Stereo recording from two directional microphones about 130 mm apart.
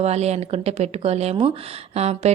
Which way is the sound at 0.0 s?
55° right (ahead or behind).